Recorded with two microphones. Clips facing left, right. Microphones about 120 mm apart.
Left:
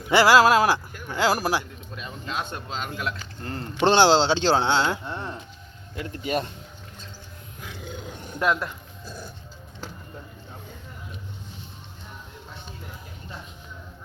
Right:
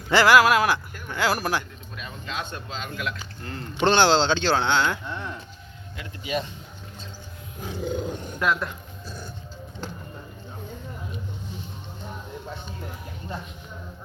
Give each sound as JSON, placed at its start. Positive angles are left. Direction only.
{"t": 0.1, "sound": "speech", "side_deg": 25}
{"t": 0.9, "sound": "speech", "side_deg": 20}
{"t": 1.3, "sound": "a man's voice", "side_deg": 35}
{"t": 3.9, "sound": "speech", "side_deg": 20}
{"t": 7.6, "sound": "roar", "side_deg": -40}
{"t": 8.6, "sound": "dog", "side_deg": 5}